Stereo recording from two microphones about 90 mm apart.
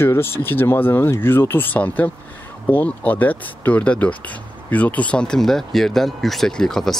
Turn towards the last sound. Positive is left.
turn(degrees=5)  # may be behind; listen again after turning